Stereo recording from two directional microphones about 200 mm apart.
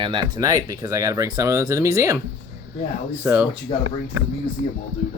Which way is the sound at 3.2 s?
10° right (ahead or behind).